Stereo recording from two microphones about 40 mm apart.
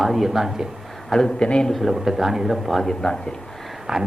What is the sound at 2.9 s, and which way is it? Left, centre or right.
Speech, centre.